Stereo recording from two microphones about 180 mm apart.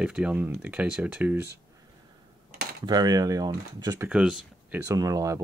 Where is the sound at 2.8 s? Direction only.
20° right (ahead or behind).